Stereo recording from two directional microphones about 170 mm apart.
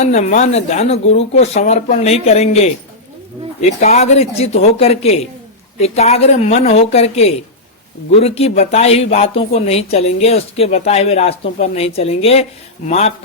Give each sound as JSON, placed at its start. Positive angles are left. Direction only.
{"t": 0.0, "sound": "speech", "side_deg": 40}